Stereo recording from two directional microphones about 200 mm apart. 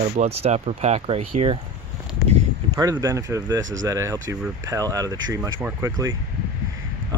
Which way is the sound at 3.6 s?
70° right (ahead or behind).